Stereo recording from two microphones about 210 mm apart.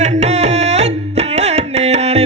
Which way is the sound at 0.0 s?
35° right (ahead or behind).